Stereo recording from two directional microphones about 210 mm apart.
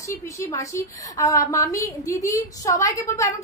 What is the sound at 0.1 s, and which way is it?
A woman's voice, 15° left (ahead or behind).